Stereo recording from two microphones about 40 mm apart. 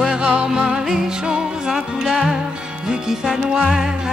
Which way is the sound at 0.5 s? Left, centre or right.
Centre.